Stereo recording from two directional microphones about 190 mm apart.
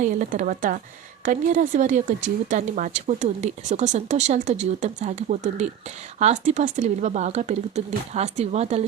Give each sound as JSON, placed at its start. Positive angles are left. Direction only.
{"t": 0.0, "sound": "a woman's voice", "side_deg": -40}